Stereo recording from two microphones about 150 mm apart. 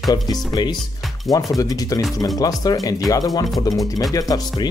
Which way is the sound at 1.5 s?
25° left (ahead or behind).